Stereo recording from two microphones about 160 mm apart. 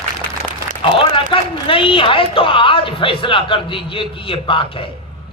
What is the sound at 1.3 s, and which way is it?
A woman's voice, 35° left (ahead or behind).